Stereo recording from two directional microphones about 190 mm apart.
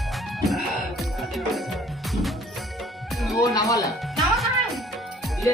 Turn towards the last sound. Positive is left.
turn(degrees=0)  # may be behind; listen again after turning